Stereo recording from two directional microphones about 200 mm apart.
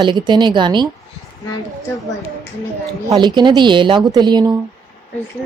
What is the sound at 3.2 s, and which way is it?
Speech, 20° right (ahead or behind).